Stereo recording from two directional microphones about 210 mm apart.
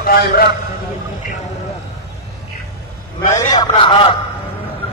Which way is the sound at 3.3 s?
20° left (ahead or behind).